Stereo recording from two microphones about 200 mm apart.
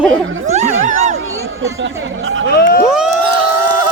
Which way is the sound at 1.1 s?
90° right.